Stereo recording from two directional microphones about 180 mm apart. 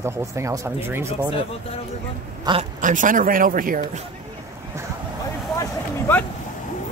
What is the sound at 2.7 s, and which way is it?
Speech, 45° right (ahead or behind).